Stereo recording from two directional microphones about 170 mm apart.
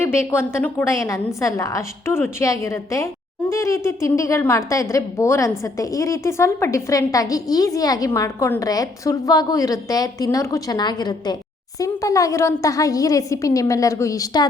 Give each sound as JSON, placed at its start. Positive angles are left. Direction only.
{"t": 0.0, "sound": "a woman's voice", "side_deg": 15}